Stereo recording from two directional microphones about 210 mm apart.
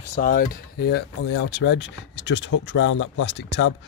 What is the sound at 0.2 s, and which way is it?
Speech, 40° left (ahead or behind).